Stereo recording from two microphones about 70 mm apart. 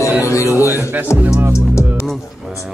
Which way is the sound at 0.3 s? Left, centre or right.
Left.